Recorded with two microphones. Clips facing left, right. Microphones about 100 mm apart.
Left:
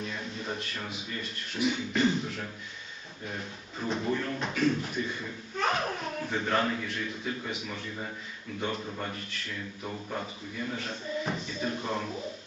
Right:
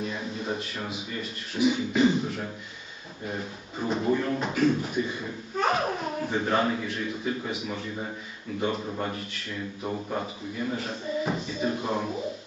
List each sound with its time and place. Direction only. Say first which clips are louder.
0.0 s a sound: right 4 dB; 5° right (ahead or behind)
0.9 s speech: right 4 dB; centre (ahead or behind)
3.2 s speech: right 5 dB; 5° right (ahead or behind)
9.8 s a man's voice: right 5 dB; 20° right (ahead or behind)
10.8 s speech: right 4 dB; 5° right (ahead or behind)